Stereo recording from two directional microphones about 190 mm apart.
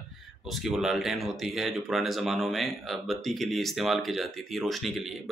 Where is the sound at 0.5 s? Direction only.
Centre (ahead or behind).